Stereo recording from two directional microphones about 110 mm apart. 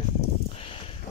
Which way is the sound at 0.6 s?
55° left (ahead or behind).